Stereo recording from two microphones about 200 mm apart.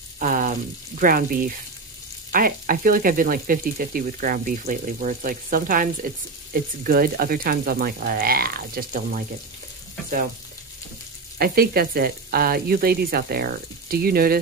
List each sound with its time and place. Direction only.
0.2 s speech: 45° right (ahead or behind)
11.3 s speech: 50° right (ahead or behind)